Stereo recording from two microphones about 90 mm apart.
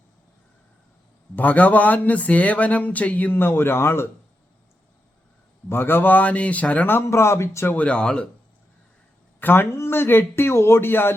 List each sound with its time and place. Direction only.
1.4 s speech: 20° left (ahead or behind)
5.6 s a man's voice: 25° left (ahead or behind)
7.8 s speech: 15° left (ahead or behind)
9.4 s a man's voice: 25° left (ahead or behind)